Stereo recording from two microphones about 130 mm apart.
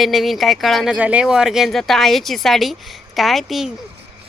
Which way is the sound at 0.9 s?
10° right (ahead or behind).